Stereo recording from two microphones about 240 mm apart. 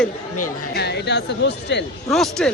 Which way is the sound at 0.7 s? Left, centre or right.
Left.